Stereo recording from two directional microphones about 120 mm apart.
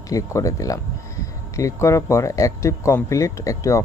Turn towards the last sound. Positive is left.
turn(degrees=25)  # may be behind; listen again after turning